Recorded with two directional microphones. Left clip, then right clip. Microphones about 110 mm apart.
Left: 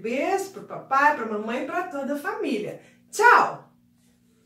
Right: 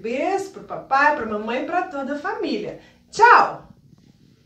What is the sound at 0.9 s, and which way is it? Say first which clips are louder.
Speech: right 3 dB; 10° left (ahead or behind).